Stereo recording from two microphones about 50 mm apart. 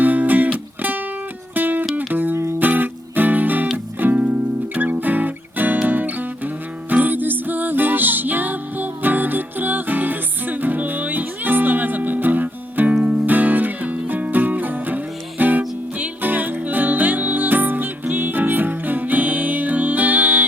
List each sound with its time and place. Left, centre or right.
0.0 s music: right
2.3 s music: right
2.6 s music: right
4.1 s music: right
13.2 s music: right